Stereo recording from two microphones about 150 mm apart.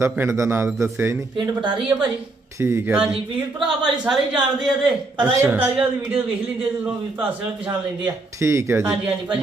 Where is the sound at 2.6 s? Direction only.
15° right (ahead or behind).